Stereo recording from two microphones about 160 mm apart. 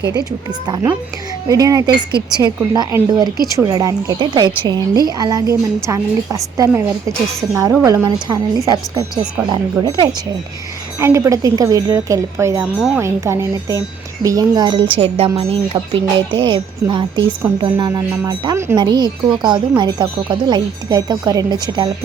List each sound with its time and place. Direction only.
0.3 s speech: 20° right (ahead or behind)